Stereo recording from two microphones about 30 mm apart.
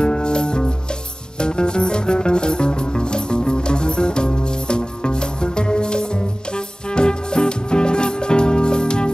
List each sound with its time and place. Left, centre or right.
0.0 s music: left